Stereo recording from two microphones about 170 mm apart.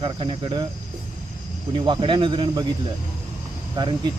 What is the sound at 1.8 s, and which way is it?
Speech, 30° right (ahead or behind).